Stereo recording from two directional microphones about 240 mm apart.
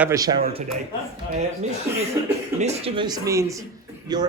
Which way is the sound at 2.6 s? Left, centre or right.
Right.